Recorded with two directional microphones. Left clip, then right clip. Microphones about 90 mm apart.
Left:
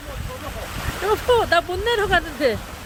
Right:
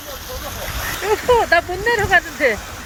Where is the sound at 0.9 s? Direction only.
5° right (ahead or behind).